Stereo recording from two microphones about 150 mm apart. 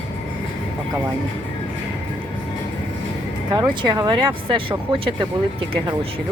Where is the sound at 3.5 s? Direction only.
30° right (ahead or behind).